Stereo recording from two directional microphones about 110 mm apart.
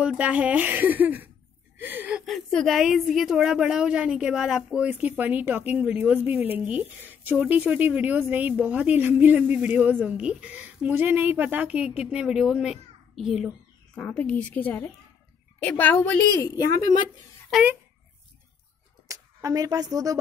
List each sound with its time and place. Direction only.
0.0 s a woman's voice: 10° right (ahead or behind)
1.8 s a sound: 20° right (ahead or behind)
2.1 s a woman's voice: centre (ahead or behind)
13.9 s a woman's voice: 10° left (ahead or behind)
17.5 s speech: centre (ahead or behind)
19.0 s speech: 35° right (ahead or behind)